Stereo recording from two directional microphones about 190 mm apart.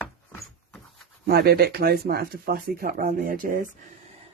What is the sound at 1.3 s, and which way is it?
Speech, 55° right (ahead or behind).